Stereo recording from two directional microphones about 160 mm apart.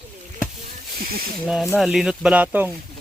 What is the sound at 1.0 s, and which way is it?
Speech, 70° right (ahead or behind).